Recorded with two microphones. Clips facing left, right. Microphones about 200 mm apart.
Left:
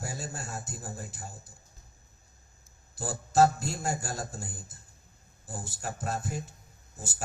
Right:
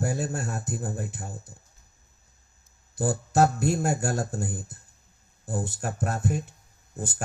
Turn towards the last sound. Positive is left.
turn(degrees=-60)  # may be behind; listen again after turning